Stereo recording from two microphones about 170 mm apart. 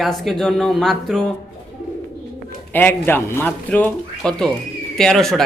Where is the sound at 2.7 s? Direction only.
10° left (ahead or behind).